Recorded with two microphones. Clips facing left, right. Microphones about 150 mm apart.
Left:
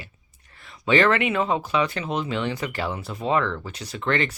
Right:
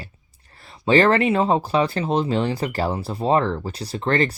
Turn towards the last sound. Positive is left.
turn(degrees=-35)  # may be behind; listen again after turning